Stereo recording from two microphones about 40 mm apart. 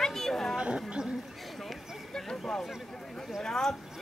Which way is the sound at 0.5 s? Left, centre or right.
Right.